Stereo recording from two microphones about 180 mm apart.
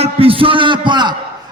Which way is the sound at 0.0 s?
30° right (ahead or behind).